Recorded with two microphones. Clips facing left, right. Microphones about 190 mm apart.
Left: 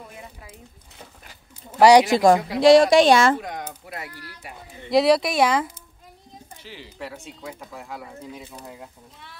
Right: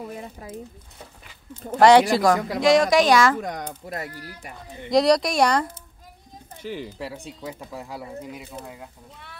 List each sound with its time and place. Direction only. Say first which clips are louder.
0.2 s speech: right 6 dB; 40° right (ahead or behind)
1.8 s a woman's voice: left 1 dB; 15° left (ahead or behind)
3.3 s speech: right 2 dB; 45° right (ahead or behind)
4.9 s speech: even; 5° left (ahead or behind)
6.6 s speech: right 6 dB; 50° right (ahead or behind)
8.2 s speech: right 2 dB; 15° right (ahead or behind)